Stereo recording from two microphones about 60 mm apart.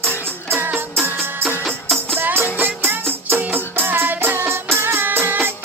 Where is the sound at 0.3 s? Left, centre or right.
Right.